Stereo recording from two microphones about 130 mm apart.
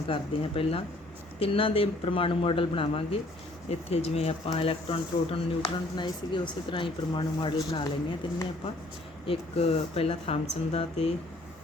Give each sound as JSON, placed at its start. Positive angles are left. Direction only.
{"t": 0.1, "sound": "speech", "side_deg": 45}
{"t": 9.2, "sound": "speech", "side_deg": 50}